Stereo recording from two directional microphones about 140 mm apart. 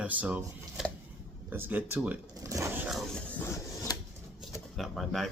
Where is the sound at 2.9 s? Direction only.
10° left (ahead or behind).